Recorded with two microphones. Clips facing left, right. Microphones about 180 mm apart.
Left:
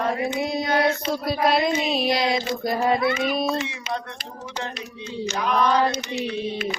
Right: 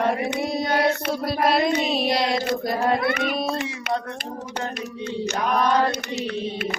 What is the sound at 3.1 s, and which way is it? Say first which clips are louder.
Speech: left 1 dB; 55° right (ahead or behind).